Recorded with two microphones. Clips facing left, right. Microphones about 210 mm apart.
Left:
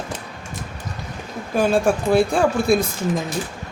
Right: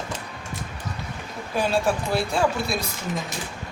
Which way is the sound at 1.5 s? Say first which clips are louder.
Left 5 dB; 50° left (ahead or behind).